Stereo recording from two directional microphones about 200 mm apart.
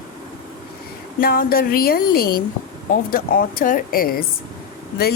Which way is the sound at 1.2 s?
45° left (ahead or behind).